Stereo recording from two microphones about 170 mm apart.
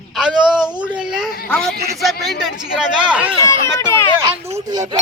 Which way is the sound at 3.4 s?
15° left (ahead or behind).